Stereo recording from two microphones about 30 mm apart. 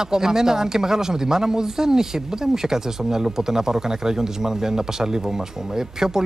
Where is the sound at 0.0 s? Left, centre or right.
Centre.